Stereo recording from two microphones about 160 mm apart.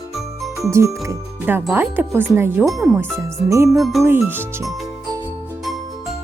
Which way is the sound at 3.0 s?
15° right (ahead or behind).